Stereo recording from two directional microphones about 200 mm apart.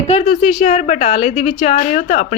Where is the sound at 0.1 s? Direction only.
35° left (ahead or behind).